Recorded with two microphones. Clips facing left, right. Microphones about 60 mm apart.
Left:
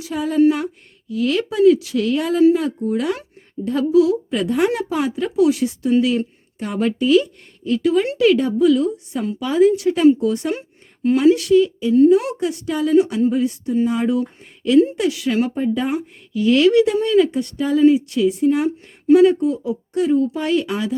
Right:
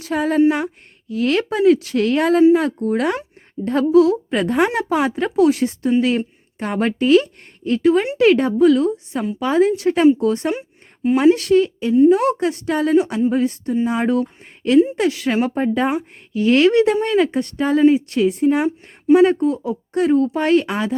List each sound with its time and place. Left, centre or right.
0.0 s speech: right
0.3 s speech: right
1.1 s speech: right
15.5 s speech: right